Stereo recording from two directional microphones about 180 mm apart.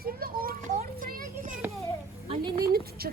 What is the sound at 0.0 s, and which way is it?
Children playing, 55° right (ahead or behind).